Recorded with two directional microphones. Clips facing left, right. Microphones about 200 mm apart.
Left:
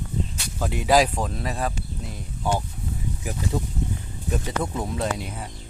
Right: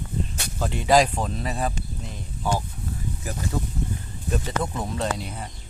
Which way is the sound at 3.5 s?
15° left (ahead or behind).